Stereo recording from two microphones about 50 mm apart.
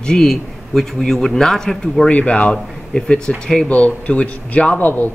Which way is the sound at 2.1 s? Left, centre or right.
Left.